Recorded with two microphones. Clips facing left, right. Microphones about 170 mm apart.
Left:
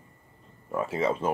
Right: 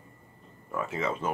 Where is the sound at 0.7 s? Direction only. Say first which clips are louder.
Left 4 dB; 30° left (ahead or behind).